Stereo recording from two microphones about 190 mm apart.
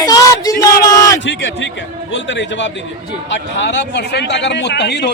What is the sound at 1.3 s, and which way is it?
A man's voice, 70° left (ahead or behind).